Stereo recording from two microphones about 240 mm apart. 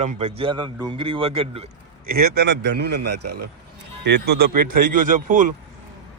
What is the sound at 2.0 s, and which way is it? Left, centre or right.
A man's voice, right.